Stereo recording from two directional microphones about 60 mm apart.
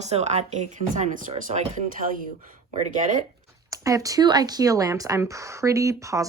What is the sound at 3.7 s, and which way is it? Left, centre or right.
Speech, right.